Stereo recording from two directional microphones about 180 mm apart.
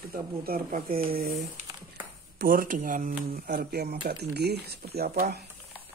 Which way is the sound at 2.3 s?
50° right (ahead or behind).